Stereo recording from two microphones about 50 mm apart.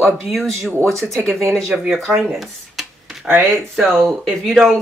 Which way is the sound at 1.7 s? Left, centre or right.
Centre.